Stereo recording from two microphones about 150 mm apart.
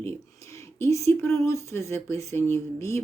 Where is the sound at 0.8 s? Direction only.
20° left (ahead or behind).